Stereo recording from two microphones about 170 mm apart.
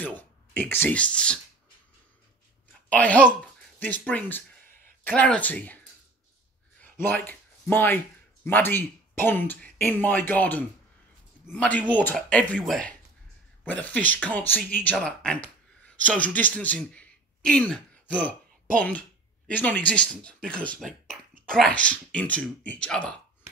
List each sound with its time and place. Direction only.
0.0 s speech: 10° left (ahead or behind)
2.9 s speech: 10° left (ahead or behind)
6.8 s a sound: 10° left (ahead or behind)
8.5 s speech: 10° left (ahead or behind)